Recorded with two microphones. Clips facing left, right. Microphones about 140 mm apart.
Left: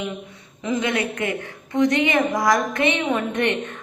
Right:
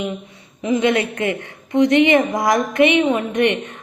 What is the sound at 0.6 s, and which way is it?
A woman's voice, 25° right (ahead or behind).